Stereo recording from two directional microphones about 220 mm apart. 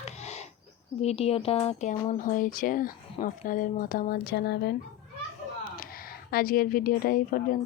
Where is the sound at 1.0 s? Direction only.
30° left (ahead or behind); by 4.7 s 45° left (ahead or behind).